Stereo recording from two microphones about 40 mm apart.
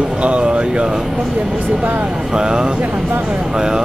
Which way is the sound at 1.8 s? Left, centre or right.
Right.